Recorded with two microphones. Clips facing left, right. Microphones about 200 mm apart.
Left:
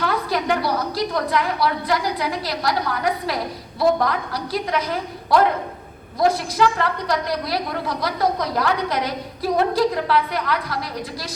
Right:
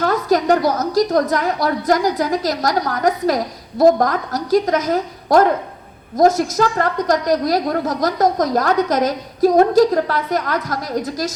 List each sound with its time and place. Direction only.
0.0 s a woman's voice: 45° right (ahead or behind)